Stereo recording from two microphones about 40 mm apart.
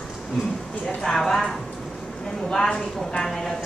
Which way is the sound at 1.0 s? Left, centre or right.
Centre.